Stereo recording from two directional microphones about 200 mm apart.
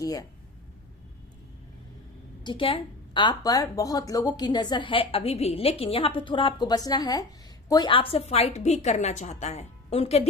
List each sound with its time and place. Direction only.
0.0 s speech: 15° left (ahead or behind)
2.4 s a woman's voice: 25° left (ahead or behind)